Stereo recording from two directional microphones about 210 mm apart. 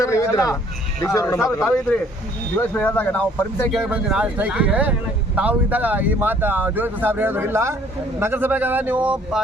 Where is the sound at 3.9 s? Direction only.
5° right (ahead or behind).